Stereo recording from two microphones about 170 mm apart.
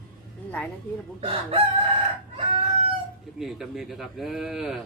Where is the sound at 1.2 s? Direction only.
35° right (ahead or behind).